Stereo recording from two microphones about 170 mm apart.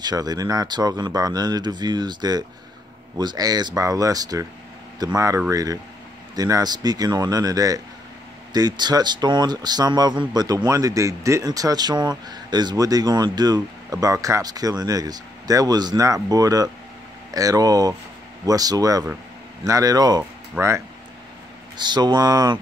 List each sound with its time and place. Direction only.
0.0 s a man's voice: 25° right (ahead or behind)